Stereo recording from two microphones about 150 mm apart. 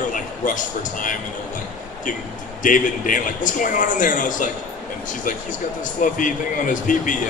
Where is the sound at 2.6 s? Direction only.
60° left (ahead or behind).